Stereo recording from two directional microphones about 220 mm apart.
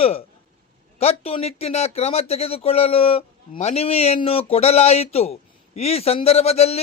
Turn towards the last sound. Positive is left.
turn(degrees=30)  # may be behind; listen again after turning